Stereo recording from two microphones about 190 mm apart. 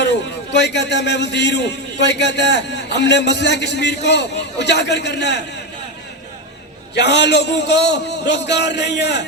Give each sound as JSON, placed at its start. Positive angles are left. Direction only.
{"t": 0.0, "sound": "a man's voice", "side_deg": 65}
{"t": 6.9, "sound": "a man's voice", "side_deg": 65}